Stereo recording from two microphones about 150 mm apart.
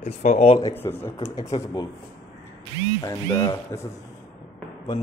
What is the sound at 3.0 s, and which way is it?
Speech, 20° left (ahead or behind).